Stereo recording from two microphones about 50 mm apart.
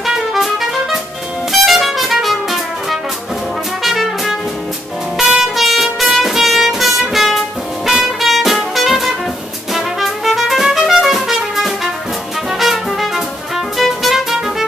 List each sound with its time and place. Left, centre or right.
0.0 s music: centre